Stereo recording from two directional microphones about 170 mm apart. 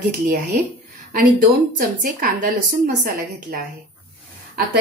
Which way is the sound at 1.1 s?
55° right (ahead or behind).